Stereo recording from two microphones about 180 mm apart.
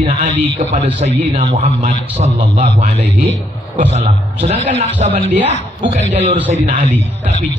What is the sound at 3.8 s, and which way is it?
A man's voice, 35° right (ahead or behind).